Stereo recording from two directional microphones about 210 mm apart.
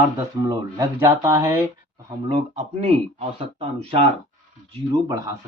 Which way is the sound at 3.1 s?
25° right (ahead or behind).